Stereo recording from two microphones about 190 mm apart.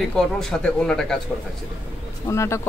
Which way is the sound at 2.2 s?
15° left (ahead or behind).